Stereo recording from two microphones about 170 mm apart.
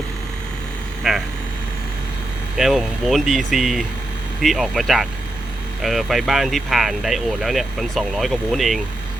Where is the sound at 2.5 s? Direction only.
5° right (ahead or behind).